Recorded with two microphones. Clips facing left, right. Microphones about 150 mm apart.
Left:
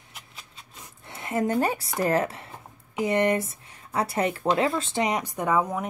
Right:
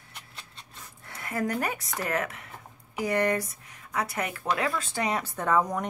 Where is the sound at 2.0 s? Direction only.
30° left (ahead or behind); by 5.8 s 10° left (ahead or behind).